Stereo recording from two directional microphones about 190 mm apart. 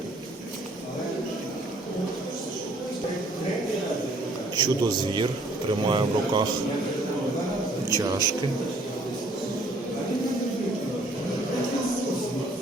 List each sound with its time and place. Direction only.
4.5 s a man's voice: 25° right (ahead or behind)
7.9 s a man's voice: 20° right (ahead or behind)